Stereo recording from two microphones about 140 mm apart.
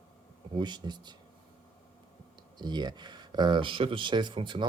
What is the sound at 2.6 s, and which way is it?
Speech, 30° right (ahead or behind).